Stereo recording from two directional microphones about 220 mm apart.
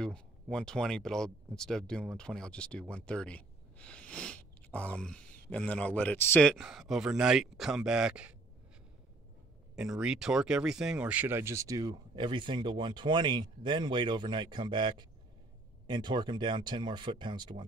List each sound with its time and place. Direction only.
0.0 s speech: 5° left (ahead or behind)
9.8 s speech: 5° right (ahead or behind); by 17.6 s 20° right (ahead or behind)